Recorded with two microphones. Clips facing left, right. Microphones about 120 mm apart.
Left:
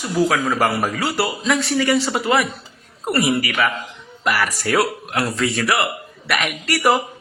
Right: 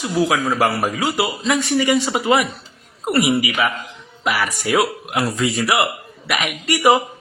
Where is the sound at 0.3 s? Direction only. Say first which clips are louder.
Right 1 dB; 5° right (ahead or behind).